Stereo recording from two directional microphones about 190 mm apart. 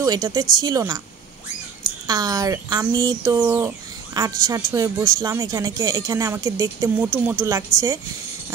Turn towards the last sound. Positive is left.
turn(degrees=-15)  # may be behind; listen again after turning